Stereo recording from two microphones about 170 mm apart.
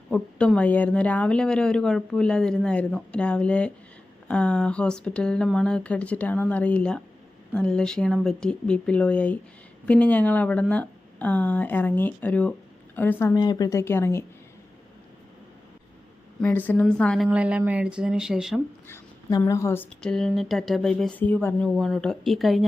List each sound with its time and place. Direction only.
0.1 s speech: 5° left (ahead or behind)
16.4 s speech: 10° left (ahead or behind)
18.9 s speech: 15° left (ahead or behind); by 22.6 s centre (ahead or behind)